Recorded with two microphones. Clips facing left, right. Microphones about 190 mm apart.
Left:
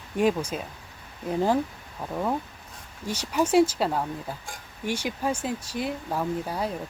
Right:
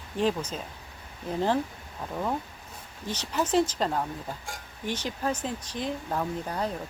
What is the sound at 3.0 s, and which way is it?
Speech, 10° left (ahead or behind).